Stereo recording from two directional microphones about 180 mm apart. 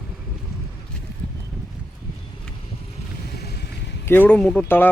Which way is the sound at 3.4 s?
65° left (ahead or behind).